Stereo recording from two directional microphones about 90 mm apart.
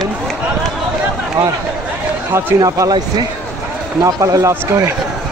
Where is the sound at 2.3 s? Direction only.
35° right (ahead or behind).